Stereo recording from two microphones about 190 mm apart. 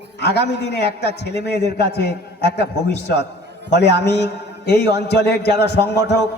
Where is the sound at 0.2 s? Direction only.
65° left (ahead or behind).